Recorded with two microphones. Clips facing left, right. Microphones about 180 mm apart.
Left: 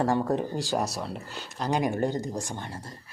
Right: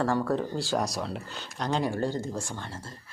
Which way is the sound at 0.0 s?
20° left (ahead or behind).